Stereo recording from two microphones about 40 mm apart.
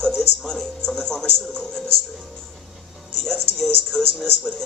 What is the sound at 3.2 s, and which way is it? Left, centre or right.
Speech, centre.